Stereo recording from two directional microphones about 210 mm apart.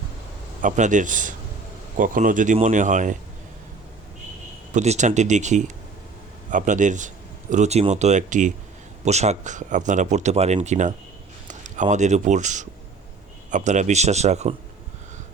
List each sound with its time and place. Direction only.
0.6 s speech: 35° right (ahead or behind)
4.7 s speech: 35° right (ahead or behind)